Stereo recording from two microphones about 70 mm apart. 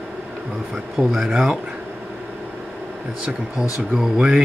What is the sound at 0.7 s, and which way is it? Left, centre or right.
Speech, centre.